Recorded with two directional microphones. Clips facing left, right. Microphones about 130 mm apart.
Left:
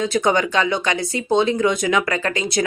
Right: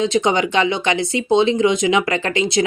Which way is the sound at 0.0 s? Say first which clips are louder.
Right 1 dB; 25° right (ahead or behind).